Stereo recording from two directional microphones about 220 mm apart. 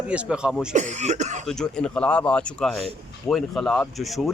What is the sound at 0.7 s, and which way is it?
Speech, 35° right (ahead or behind).